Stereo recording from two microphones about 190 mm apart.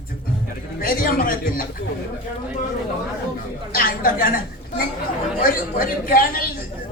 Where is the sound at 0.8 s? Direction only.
50° left (ahead or behind).